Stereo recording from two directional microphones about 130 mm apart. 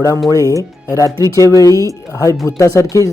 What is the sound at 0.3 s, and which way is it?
Speech, 25° left (ahead or behind).